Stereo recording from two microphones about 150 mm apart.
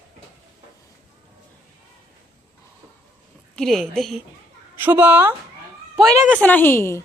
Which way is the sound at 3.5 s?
Centre (ahead or behind).